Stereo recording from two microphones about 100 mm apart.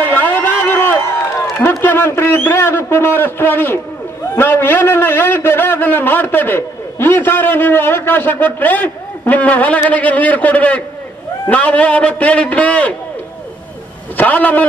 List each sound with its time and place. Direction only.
0.0 s a sound: 20° left (ahead or behind)
1.6 s a man's voice: 25° left (ahead or behind)
14.1 s a man's voice: 15° left (ahead or behind)